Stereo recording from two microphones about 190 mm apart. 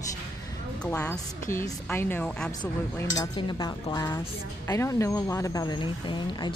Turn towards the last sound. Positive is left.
turn(degrees=25)  # may be behind; listen again after turning